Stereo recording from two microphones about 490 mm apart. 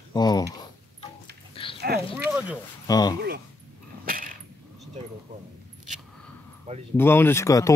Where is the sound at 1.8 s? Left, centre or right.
Centre.